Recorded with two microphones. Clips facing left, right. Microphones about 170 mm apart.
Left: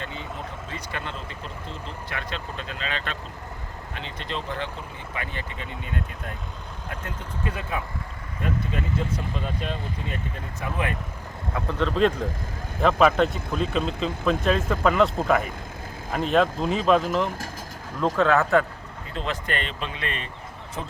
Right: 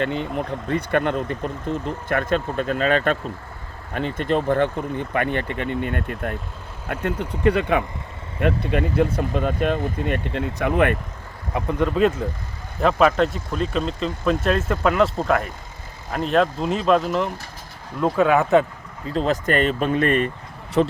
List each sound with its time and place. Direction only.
0.0 s speech: 65° right (ahead or behind)
10.3 s speech: 70° right (ahead or behind)
11.5 s speech: 15° right (ahead or behind)
18.2 s speech: 15° right (ahead or behind)
19.1 s speech: 40° right (ahead or behind)
20.8 s speech: 75° right (ahead or behind)